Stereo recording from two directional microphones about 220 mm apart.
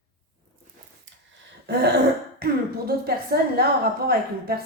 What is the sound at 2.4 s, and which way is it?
Speech, 45° right (ahead or behind).